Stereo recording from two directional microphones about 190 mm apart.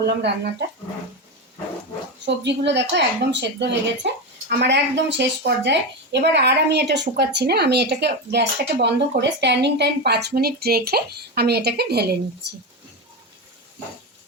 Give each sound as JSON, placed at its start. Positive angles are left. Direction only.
{"t": 0.0, "sound": "a woman's voice", "side_deg": -60}
{"t": 2.2, "sound": "a woman's voice", "side_deg": -65}